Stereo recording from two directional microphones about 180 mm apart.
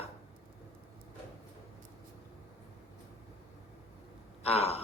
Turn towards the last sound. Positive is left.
turn(degrees=35)  # may be behind; listen again after turning